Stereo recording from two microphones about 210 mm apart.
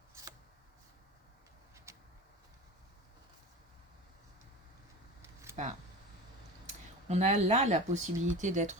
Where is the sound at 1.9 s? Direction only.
15° right (ahead or behind).